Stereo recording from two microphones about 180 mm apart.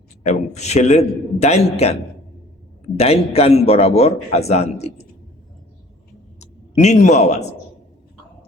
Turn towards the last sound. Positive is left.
turn(degrees=35)  # may be behind; listen again after turning